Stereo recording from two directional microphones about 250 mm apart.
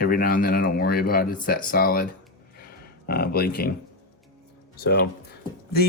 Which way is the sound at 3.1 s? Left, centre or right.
Left.